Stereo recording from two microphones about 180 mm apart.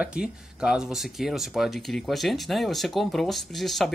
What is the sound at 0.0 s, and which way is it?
Speech, 5° right (ahead or behind).